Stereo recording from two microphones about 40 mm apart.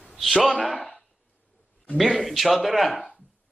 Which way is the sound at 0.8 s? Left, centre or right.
Centre.